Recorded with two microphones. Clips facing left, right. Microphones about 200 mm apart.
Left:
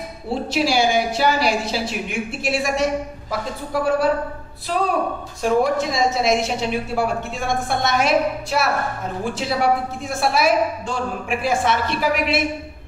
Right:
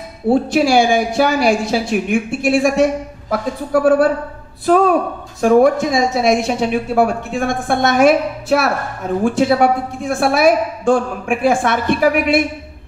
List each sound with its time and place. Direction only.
0.3 s speech: 50° right (ahead or behind)